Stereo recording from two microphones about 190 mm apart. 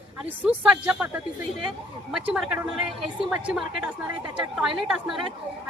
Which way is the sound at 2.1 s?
5° right (ahead or behind).